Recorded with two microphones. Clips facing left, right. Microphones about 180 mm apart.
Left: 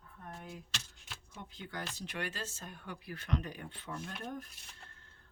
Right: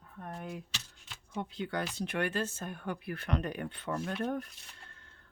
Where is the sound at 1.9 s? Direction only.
55° right (ahead or behind).